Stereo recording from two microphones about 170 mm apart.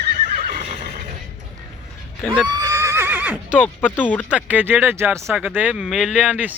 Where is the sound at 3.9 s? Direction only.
10° left (ahead or behind).